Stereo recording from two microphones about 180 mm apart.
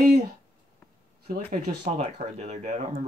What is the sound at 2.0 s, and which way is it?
Speech, 40° right (ahead or behind).